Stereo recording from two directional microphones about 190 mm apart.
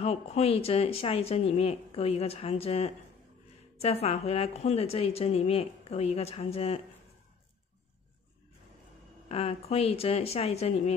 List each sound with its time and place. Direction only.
0.0 s a woman's voice: 35° left (ahead or behind)
9.3 s a woman's voice: 30° left (ahead or behind)